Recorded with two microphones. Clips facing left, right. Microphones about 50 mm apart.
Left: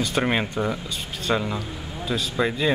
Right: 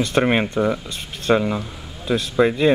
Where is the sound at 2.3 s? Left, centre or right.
Right.